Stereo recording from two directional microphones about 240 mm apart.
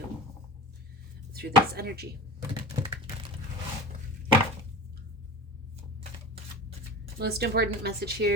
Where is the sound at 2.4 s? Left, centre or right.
Centre.